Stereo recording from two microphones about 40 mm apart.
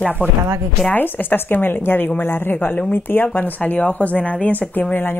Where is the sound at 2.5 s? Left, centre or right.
Left.